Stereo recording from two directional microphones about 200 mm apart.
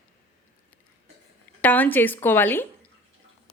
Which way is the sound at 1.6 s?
10° left (ahead or behind).